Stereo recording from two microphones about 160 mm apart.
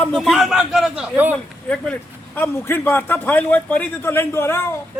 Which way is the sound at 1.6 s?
10° left (ahead or behind).